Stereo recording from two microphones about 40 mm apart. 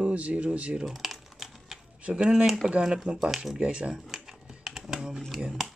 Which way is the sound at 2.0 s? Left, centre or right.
Right.